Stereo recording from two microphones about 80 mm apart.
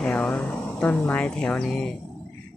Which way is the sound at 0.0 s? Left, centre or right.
Centre.